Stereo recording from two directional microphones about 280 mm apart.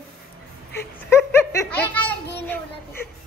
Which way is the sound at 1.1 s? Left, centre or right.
Centre.